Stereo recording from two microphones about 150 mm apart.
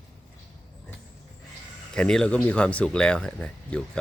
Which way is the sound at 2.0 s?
5° left (ahead or behind).